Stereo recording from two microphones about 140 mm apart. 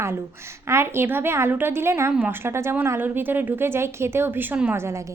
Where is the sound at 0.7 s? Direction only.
15° right (ahead or behind).